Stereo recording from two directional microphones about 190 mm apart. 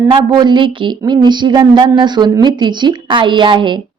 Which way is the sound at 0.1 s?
20° right (ahead or behind).